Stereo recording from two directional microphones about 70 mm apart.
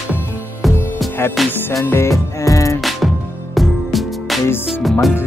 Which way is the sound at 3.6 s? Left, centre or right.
Centre.